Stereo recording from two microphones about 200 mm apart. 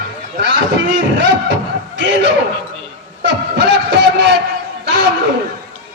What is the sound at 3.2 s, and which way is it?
Music, 60° right (ahead or behind).